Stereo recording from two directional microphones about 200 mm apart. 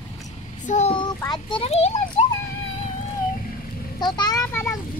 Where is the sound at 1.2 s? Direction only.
20° left (ahead or behind).